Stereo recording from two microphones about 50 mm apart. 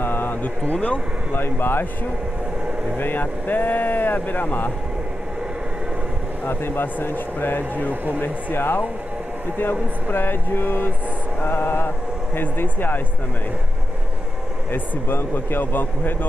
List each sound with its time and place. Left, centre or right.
0.0 s a sound: left
0.7 s speech: left
1.3 s speech: left
3.0 s speech: left
6.4 s speech: left
7.9 s speech: right
8.2 s speech: left
14.7 s speech: left